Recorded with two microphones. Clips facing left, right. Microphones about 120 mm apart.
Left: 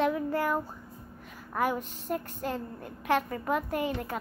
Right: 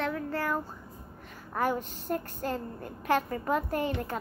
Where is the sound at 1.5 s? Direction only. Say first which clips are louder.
Even; centre (ahead or behind).